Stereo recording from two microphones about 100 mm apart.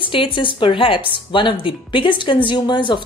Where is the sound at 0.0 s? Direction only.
55° left (ahead or behind).